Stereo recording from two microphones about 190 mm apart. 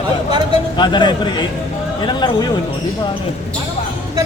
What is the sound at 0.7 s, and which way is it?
Speech, 25° left (ahead or behind).